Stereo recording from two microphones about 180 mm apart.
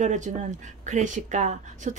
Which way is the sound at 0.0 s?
45° right (ahead or behind).